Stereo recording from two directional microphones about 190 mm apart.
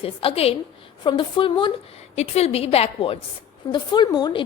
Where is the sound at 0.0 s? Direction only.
30° left (ahead or behind).